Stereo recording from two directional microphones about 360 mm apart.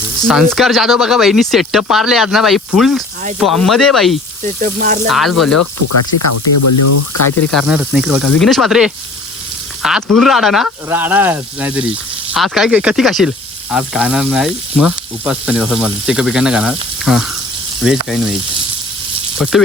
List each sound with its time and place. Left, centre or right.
0.3 s speech: centre
4.4 s speech: right
5.5 s speech: left
7.5 s speech: centre
19.4 s speech: centre